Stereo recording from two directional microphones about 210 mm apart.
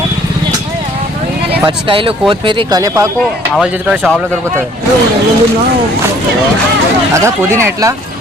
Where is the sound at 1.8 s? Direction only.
25° right (ahead or behind).